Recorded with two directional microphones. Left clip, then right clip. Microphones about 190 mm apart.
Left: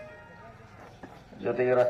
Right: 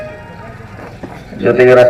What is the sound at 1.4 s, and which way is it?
Speech, 50° right (ahead or behind).